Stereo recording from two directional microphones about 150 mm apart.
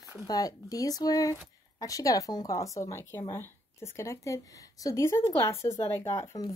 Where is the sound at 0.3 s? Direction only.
25° left (ahead or behind).